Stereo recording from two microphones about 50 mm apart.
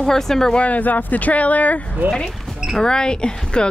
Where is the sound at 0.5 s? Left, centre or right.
Left.